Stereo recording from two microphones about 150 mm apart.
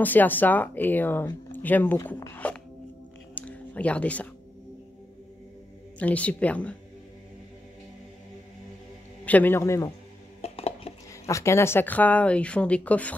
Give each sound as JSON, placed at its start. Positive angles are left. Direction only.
{"t": 0.0, "sound": "speech", "side_deg": 10}
{"t": 3.3, "sound": "a sound", "side_deg": 10}
{"t": 5.9, "sound": "speech", "side_deg": 10}
{"t": 9.2, "sound": "speech", "side_deg": 10}
{"t": 10.4, "sound": "dishes", "side_deg": 45}
{"t": 11.2, "sound": "speech", "side_deg": 20}